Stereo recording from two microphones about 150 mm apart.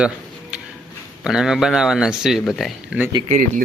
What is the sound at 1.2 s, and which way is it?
Speech, 5° right (ahead or behind).